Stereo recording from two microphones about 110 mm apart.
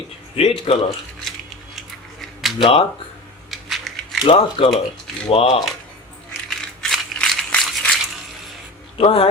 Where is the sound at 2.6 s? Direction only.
60° left (ahead or behind).